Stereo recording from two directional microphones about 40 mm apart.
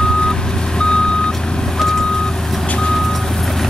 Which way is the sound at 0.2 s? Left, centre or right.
Left.